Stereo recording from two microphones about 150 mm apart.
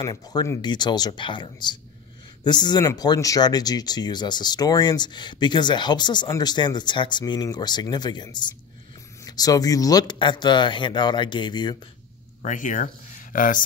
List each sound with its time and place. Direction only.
0.0 s speech: 25° left (ahead or behind)
12.4 s speech: 60° left (ahead or behind)